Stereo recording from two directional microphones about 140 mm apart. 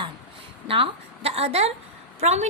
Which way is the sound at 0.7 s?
45° right (ahead or behind).